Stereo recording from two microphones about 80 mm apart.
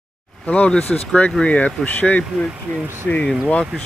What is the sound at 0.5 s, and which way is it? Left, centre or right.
Speech, centre.